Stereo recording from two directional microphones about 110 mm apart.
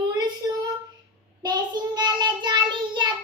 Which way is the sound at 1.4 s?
40° right (ahead or behind).